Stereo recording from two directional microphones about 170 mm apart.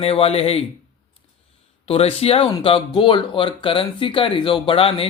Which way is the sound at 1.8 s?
35° left (ahead or behind).